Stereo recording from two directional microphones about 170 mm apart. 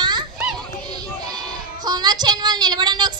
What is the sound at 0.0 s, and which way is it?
Children playing, 25° right (ahead or behind).